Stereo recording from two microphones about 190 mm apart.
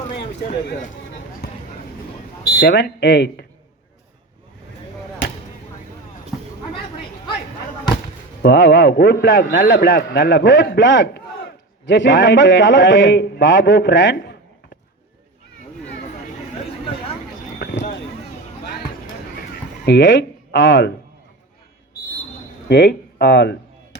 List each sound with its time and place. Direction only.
1.4 s a sound: 55° left (ahead or behind)
2.5 s a man's voice: 55° left (ahead or behind)
8.4 s a man's voice: 65° left (ahead or behind)
19.8 s speech: 65° left (ahead or behind)
22.7 s speech: 60° left (ahead or behind)